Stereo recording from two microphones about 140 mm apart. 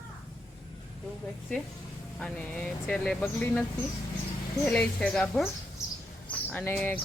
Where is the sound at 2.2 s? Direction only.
5° left (ahead or behind).